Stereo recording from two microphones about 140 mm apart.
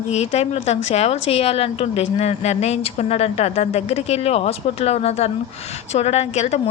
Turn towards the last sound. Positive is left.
turn(degrees=50)  # may be behind; listen again after turning